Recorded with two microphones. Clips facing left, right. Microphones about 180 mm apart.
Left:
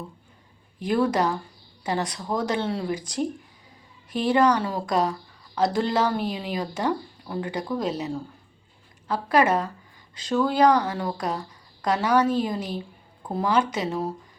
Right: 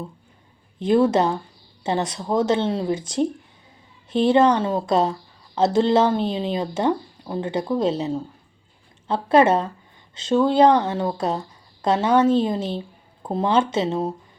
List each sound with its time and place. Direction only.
0.8 s speech: 25° right (ahead or behind)